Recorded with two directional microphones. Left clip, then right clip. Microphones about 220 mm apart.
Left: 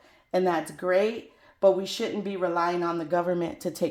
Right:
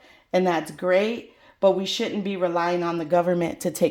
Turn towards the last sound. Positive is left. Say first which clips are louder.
# right 4 dB
turn(degrees=-40)  # may be behind; listen again after turning